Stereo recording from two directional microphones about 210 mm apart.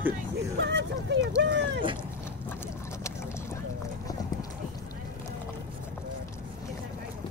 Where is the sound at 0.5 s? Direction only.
55° right (ahead or behind).